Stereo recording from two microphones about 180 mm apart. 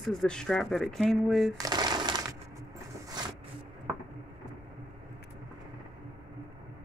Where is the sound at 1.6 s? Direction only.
25° right (ahead or behind).